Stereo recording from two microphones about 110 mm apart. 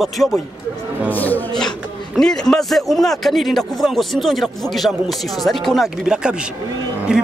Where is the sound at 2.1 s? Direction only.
5° left (ahead or behind).